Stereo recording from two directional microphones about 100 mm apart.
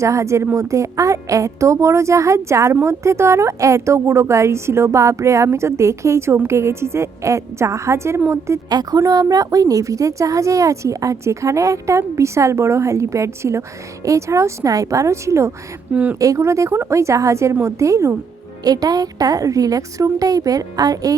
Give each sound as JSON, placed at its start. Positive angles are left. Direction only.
{"t": 0.0, "sound": "a woman's voice", "side_deg": -30}
{"t": 15.9, "sound": "speech", "side_deg": -15}
{"t": 16.1, "sound": "a woman's voice", "side_deg": -35}